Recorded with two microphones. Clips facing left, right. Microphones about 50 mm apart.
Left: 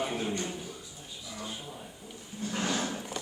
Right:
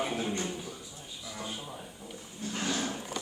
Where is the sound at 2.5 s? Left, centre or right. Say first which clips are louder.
Left 1 dB; centre.